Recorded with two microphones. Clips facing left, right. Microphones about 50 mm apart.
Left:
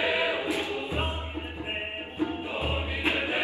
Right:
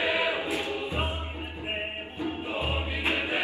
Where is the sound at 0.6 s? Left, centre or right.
Left.